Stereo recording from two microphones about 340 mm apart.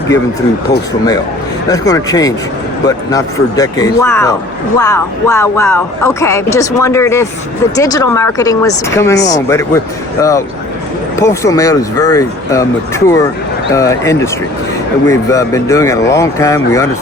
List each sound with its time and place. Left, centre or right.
1.6 s speech: centre